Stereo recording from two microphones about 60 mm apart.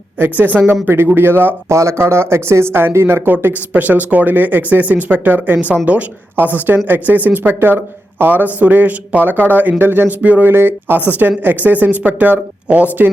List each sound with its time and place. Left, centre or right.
0.3 s a man's voice: right
1.7 s speech: right
3.3 s a man's voice: right
10.5 s a man's voice: right